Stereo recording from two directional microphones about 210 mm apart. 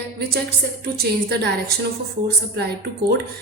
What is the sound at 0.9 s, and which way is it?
A woman's voice, 50° right (ahead or behind).